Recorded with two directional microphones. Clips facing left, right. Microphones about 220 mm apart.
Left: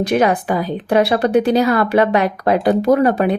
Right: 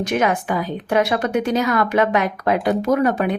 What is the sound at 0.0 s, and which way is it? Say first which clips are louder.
Speech: left 4 dB; 35° left (ahead or behind).